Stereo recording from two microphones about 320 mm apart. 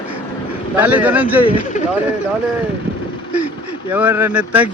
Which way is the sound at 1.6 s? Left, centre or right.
Left.